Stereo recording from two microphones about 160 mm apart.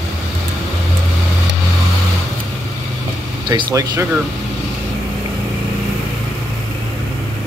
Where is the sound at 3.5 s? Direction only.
25° right (ahead or behind).